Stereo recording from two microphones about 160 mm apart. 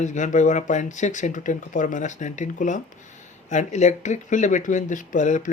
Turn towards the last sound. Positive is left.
turn(degrees=50)  # may be behind; listen again after turning